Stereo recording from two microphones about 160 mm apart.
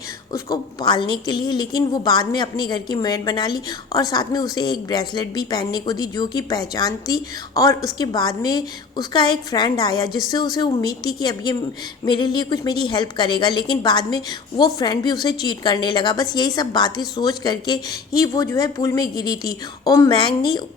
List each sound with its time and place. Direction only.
0.3 s a woman's voice: 20° left (ahead or behind)